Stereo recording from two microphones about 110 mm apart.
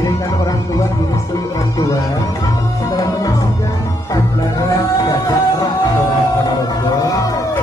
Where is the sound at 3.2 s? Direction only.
35° left (ahead or behind).